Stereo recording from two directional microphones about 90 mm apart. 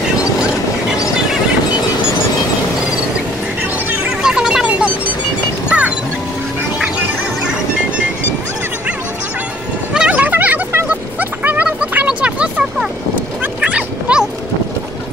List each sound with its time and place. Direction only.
3.9 s music: 10° right (ahead or behind)
9.9 s a sound: 15° right (ahead or behind)
13.6 s dog: 15° right (ahead or behind)